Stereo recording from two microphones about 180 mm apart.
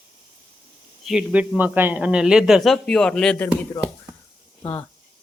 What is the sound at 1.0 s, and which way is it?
A man's voice, 5° right (ahead or behind).